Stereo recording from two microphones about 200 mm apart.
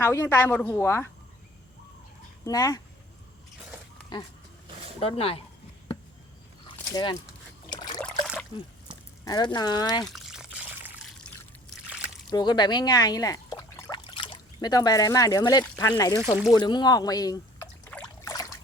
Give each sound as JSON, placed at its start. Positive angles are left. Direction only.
{"t": 0.0, "sound": "a woman's voice", "side_deg": 15}
{"t": 2.4, "sound": "speech", "side_deg": 15}
{"t": 4.9, "sound": "speech", "side_deg": 30}
{"t": 6.7, "sound": "a sound", "side_deg": 20}
{"t": 7.7, "sound": "trickle", "side_deg": 20}
{"t": 8.0, "sound": "a sound", "side_deg": 5}
{"t": 9.2, "sound": "speech", "side_deg": 20}
{"t": 10.1, "sound": "water", "side_deg": 0}
{"t": 11.9, "sound": "splash", "side_deg": -5}
{"t": 12.3, "sound": "a woman's voice", "side_deg": 20}
{"t": 16.5, "sound": "a sound", "side_deg": 20}